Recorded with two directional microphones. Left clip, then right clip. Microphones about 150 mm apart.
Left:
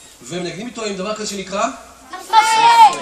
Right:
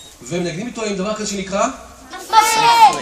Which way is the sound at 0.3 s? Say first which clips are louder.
Right 3 dB; centre (ahead or behind).